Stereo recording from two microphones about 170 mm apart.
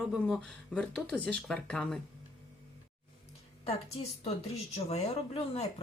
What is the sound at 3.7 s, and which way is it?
A woman's voice, 35° left (ahead or behind).